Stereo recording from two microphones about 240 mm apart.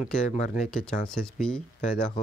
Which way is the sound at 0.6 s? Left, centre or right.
Centre.